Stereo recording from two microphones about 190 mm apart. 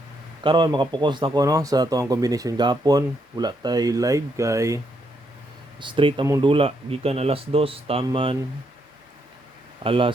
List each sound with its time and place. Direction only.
0.4 s speech: 25° right (ahead or behind)
5.8 s speech: 25° right (ahead or behind)
9.8 s speech: 30° right (ahead or behind)